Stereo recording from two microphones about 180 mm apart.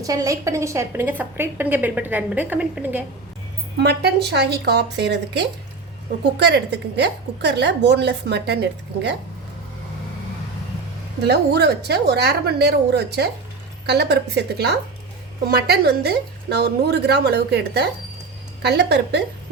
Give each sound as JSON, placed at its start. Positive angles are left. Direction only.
{"t": 0.0, "sound": "a woman's voice", "side_deg": -20}
{"t": 3.8, "sound": "a woman's voice", "side_deg": -65}
{"t": 11.2, "sound": "a woman's voice", "side_deg": -65}